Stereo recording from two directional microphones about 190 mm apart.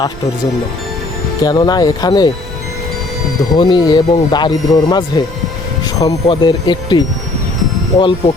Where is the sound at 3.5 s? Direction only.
25° left (ahead or behind).